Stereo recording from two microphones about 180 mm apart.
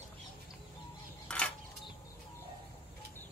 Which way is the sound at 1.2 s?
5° left (ahead or behind).